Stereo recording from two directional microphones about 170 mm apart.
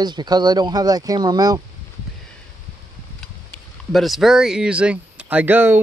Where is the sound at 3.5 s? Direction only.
Centre (ahead or behind).